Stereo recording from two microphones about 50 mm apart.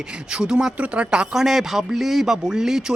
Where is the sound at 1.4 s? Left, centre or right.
Centre.